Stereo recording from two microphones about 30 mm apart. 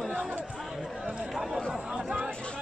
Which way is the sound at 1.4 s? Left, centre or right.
Centre.